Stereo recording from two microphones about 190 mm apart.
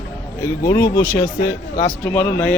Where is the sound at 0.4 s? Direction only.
15° left (ahead or behind).